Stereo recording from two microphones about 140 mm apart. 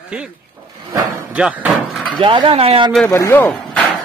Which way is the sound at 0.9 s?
20° right (ahead or behind).